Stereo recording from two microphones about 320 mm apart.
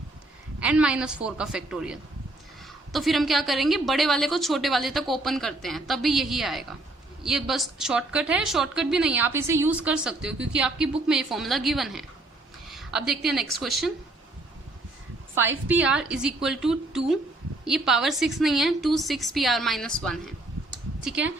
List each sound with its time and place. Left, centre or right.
0.6 s a woman's voice: centre
15.4 s a woman's voice: centre